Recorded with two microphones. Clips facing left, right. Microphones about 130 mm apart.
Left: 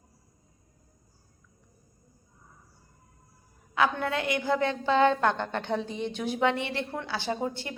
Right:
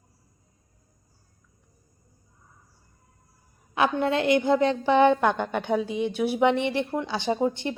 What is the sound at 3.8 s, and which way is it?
A woman's voice, 20° right (ahead or behind).